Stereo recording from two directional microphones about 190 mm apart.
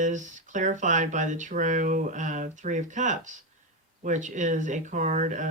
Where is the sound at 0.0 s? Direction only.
40° right (ahead or behind).